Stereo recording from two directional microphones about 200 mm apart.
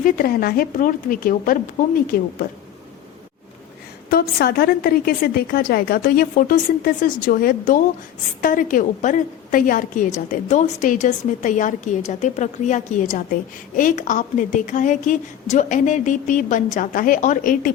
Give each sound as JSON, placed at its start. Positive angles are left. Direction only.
{"t": 0.0, "sound": "a woman's voice", "side_deg": 45}
{"t": 4.1, "sound": "a woman's voice", "side_deg": 50}